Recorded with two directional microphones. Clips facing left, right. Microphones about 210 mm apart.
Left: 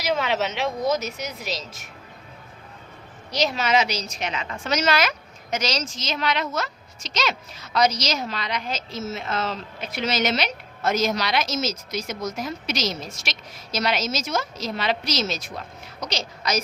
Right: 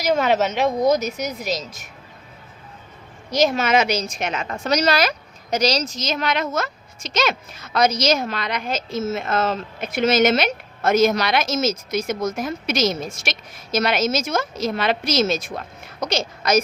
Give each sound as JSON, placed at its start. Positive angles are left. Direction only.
{"t": 0.0, "sound": "a woman's voice", "side_deg": -45}
{"t": 3.3, "sound": "a woman's voice", "side_deg": -50}